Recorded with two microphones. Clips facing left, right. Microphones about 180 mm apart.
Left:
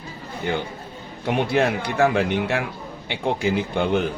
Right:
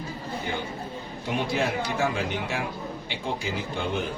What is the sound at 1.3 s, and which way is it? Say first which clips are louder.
Speech: left 6 dB; 65° left (ahead or behind).